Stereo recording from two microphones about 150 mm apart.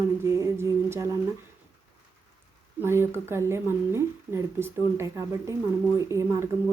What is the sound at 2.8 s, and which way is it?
Speech, 15° right (ahead or behind).